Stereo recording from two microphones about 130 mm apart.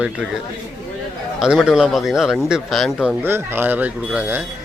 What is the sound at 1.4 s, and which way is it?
Speech, 5° right (ahead or behind).